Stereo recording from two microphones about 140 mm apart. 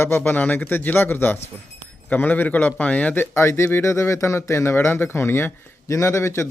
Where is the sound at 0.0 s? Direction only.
15° left (ahead or behind).